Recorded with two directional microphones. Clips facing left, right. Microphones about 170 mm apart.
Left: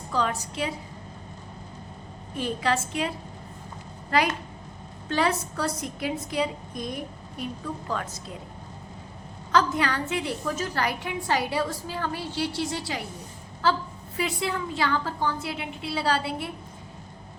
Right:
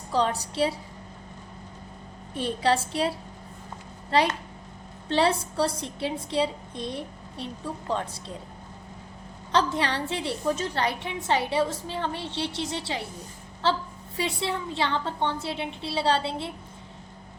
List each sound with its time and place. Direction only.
0.1 s a woman's voice: 30° right (ahead or behind)
2.3 s a woman's voice: 35° right (ahead or behind)
9.5 s a woman's voice: 30° right (ahead or behind)